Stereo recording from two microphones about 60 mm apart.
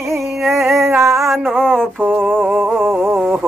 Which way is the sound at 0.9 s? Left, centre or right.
Right.